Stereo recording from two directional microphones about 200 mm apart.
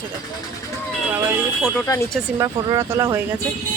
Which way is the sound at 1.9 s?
15° left (ahead or behind).